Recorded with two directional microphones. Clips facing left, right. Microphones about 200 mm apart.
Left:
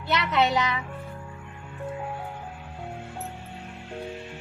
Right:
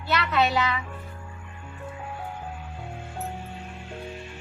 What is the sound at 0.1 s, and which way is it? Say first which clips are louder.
Speech: even; 20° left (ahead or behind).